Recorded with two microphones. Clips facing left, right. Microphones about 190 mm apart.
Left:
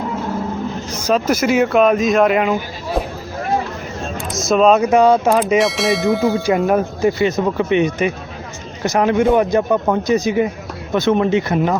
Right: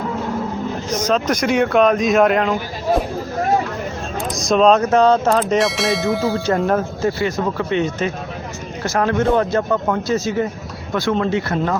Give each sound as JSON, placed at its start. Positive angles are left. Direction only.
{"t": 0.9, "sound": "speech", "side_deg": 10}
{"t": 4.2, "sound": "speech", "side_deg": 0}
{"t": 6.4, "sound": "speech", "side_deg": 10}